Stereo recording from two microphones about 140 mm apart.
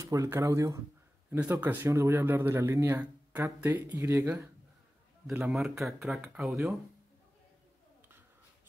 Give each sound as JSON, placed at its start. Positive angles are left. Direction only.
{"t": 0.0, "sound": "speech", "side_deg": -20}
{"t": 5.4, "sound": "speech", "side_deg": 0}